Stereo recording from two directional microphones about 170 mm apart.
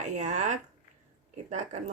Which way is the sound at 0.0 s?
45° right (ahead or behind).